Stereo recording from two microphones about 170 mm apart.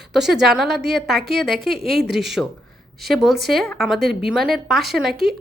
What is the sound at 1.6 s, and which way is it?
Speech, 70° right (ahead or behind).